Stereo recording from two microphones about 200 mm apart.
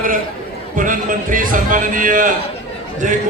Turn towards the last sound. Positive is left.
turn(degrees=-40)  # may be behind; listen again after turning